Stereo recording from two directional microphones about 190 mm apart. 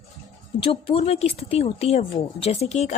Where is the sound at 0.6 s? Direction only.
30° left (ahead or behind).